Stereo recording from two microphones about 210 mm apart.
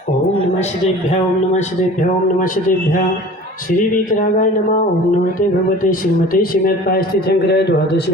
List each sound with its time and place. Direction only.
2.4 s speech: 40° left (ahead or behind)
5.8 s a man's voice: 40° left (ahead or behind)